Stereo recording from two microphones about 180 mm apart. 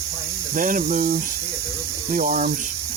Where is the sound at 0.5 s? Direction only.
50° right (ahead or behind).